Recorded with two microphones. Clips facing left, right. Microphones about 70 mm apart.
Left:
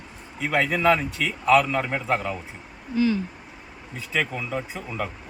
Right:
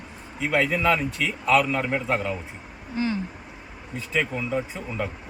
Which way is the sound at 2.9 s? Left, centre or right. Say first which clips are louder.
Left 4 dB; right.